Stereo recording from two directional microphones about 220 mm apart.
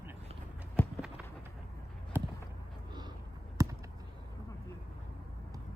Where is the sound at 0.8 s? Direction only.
10° left (ahead or behind).